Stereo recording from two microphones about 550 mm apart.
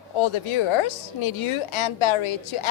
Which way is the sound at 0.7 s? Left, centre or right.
Left.